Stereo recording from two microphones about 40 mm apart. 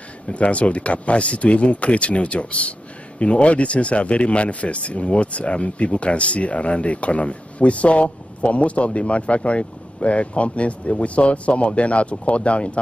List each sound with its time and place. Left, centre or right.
0.3 s speech: left